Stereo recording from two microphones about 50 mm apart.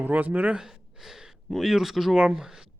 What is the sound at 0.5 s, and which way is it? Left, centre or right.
Speech, centre.